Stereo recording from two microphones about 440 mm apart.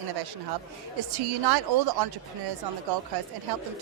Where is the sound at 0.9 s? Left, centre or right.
Right.